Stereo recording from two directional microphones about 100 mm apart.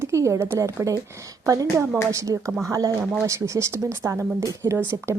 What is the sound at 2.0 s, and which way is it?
A woman's voice, 35° right (ahead or behind).